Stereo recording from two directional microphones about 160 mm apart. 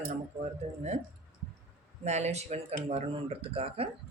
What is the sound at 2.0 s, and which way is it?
Speech, 45° right (ahead or behind).